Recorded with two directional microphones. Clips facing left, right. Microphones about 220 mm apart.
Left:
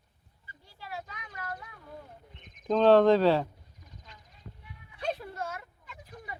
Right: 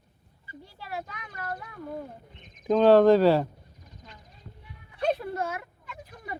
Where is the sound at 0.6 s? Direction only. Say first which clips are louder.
Right 4 dB; 65° right (ahead or behind).